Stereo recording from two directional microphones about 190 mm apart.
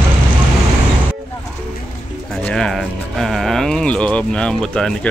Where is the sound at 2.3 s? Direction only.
5° left (ahead or behind).